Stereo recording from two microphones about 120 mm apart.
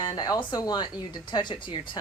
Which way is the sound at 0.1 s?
35° left (ahead or behind).